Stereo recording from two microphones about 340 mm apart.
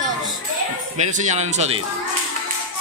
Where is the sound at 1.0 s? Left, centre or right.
Centre.